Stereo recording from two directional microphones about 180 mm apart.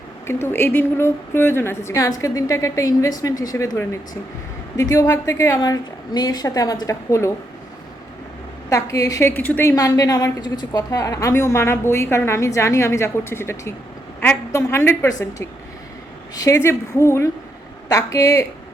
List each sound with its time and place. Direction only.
0.3 s a woman's voice: 15° left (ahead or behind)
8.7 s a woman's voice: 20° left (ahead or behind)
16.3 s a woman's voice: 20° left (ahead or behind)